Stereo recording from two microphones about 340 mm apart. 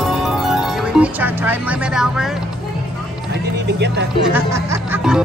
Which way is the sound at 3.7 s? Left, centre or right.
Right.